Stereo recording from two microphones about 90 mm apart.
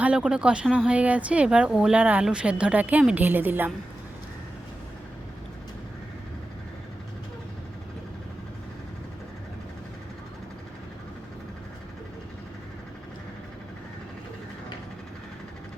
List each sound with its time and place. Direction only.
0.0 s a woman's voice: 10° right (ahead or behind)